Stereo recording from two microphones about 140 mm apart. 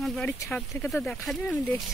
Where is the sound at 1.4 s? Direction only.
10° left (ahead or behind).